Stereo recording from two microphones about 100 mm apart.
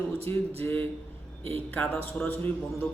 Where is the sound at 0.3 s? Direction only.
25° left (ahead or behind).